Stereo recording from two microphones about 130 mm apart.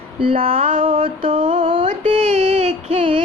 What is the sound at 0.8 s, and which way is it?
Mantra, 40° right (ahead or behind).